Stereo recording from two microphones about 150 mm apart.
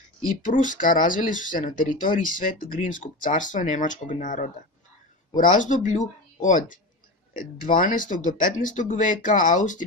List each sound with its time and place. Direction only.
0.3 s speech: 60° left (ahead or behind)